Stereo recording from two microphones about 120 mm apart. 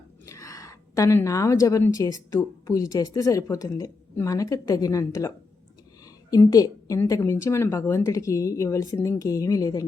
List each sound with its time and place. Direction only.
0.3 s a woman's voice: 25° left (ahead or behind)
6.3 s a woman's voice: 30° left (ahead or behind)